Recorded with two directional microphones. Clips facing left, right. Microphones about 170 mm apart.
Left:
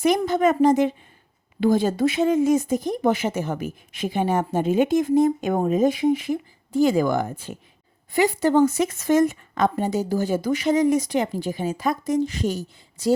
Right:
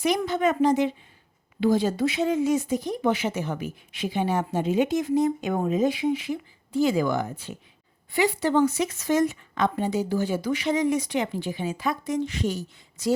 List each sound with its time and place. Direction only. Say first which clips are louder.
0.0 s speech: left 4 dB; 45° left (ahead or behind)